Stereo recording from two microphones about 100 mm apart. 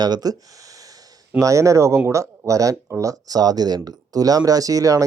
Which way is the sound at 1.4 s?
35° right (ahead or behind).